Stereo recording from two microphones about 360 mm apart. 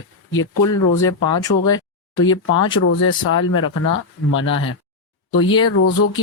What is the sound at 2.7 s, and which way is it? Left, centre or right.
Speech, left.